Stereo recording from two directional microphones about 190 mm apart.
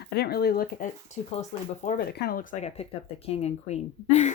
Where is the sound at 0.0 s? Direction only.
55° left (ahead or behind).